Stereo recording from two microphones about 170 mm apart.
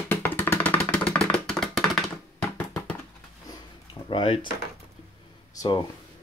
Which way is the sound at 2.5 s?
10° left (ahead or behind).